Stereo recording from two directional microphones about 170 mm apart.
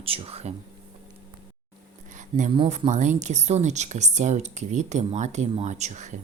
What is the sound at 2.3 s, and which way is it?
Speech, 30° right (ahead or behind).